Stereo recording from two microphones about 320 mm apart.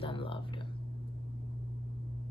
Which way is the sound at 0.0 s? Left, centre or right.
Centre.